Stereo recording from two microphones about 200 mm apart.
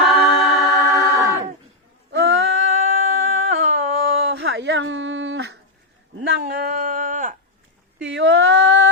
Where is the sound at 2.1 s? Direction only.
65° right (ahead or behind).